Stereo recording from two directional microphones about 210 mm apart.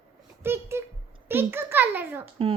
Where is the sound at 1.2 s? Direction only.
10° right (ahead or behind).